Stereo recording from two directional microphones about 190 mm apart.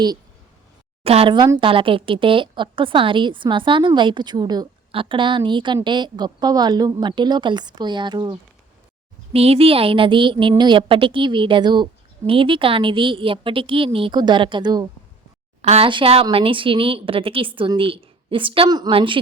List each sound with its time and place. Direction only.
1.0 s a woman's voice: 30° right (ahead or behind)